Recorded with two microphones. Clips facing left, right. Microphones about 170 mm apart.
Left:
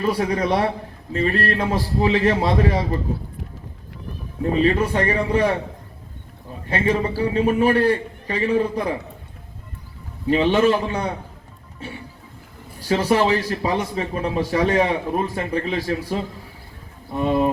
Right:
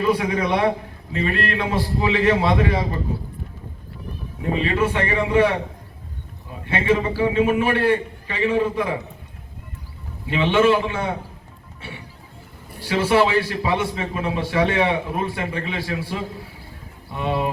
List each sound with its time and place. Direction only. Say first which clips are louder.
0.0 s a man's voice: even; 40° left (ahead or behind)
4.5 s a man's voice: left 2 dB; 40° left (ahead or behind)
6.7 s a man's voice: right 1 dB; 40° left (ahead or behind)
10.2 s a man's voice: left 1 dB; 40° left (ahead or behind)